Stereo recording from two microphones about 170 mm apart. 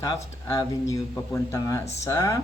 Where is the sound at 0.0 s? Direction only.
20° left (ahead or behind).